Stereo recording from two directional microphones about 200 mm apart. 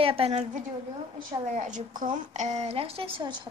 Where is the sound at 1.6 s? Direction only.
40° right (ahead or behind).